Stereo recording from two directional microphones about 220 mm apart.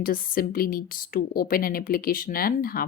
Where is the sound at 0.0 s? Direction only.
40° left (ahead or behind).